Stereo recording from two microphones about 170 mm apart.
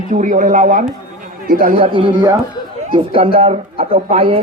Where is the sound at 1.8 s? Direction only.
30° right (ahead or behind).